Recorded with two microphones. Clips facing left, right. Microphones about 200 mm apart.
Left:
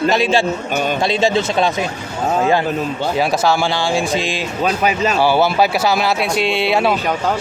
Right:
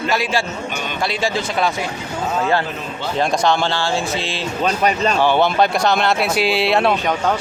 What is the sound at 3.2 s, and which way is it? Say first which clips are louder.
A man's voice: even; 5° left (ahead or behind).